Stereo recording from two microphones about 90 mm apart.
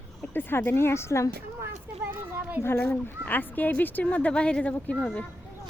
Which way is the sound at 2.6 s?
20° left (ahead or behind).